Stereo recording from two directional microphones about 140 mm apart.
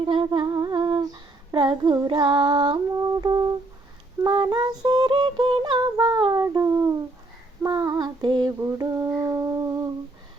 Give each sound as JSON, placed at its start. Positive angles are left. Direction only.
{"t": 0.0, "sound": "female singing", "side_deg": -40}
{"t": 0.3, "sound": "humming", "side_deg": -30}
{"t": 1.5, "sound": "female singing", "side_deg": -35}
{"t": 4.3, "sound": "a sound", "side_deg": -35}
{"t": 7.6, "sound": "female singing", "side_deg": -25}